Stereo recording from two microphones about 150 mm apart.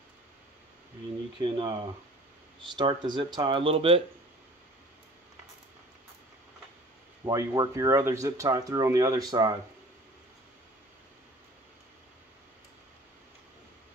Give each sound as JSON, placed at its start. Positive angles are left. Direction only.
{"t": 1.4, "sound": "speech", "side_deg": -35}
{"t": 7.2, "sound": "speech", "side_deg": -25}